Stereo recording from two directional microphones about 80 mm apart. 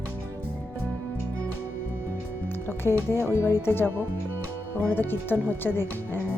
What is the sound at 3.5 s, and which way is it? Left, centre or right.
Speech, left.